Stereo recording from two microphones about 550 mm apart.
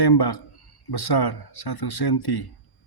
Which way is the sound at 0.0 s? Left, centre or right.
Left.